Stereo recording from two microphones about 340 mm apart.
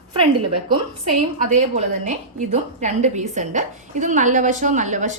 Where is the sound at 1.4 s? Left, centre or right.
Right.